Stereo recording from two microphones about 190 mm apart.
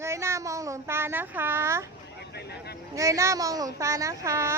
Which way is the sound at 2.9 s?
15° right (ahead or behind).